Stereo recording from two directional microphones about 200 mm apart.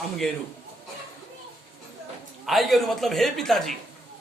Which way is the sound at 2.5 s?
Centre (ahead or behind).